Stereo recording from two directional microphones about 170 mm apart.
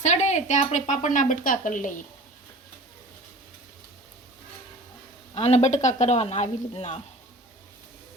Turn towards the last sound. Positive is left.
turn(degrees=40)  # may be behind; listen again after turning